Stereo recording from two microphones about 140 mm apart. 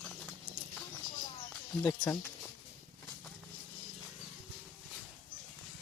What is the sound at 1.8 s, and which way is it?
Speech, 20° left (ahead or behind).